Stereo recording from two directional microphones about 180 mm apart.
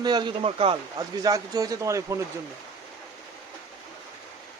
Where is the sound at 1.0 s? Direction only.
20° right (ahead or behind).